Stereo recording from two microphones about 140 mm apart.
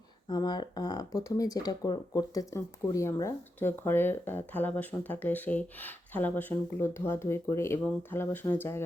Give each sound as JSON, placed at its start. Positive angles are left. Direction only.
{"t": 0.3, "sound": "speech", "side_deg": 30}